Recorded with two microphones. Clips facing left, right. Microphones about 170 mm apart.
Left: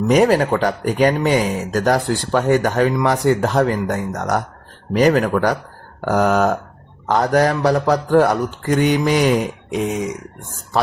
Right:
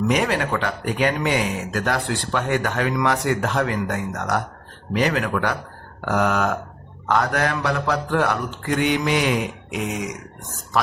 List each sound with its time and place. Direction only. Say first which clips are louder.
0.1 s speech: left 7 dB; 40° left (ahead or behind)